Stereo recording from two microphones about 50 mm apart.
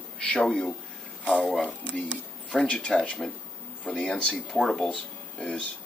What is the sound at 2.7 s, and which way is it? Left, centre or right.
A man's voice, centre.